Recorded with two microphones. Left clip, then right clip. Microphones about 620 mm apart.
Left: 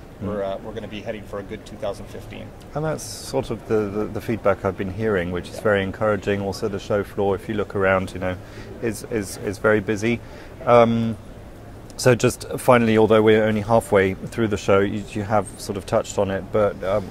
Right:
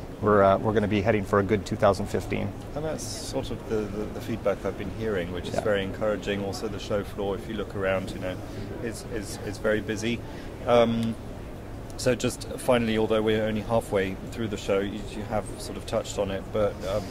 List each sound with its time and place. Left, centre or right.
0.3 s speech: right
2.7 s speech: left
12.0 s speech: left